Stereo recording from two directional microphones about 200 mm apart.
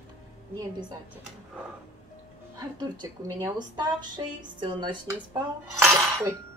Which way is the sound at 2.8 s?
20° right (ahead or behind).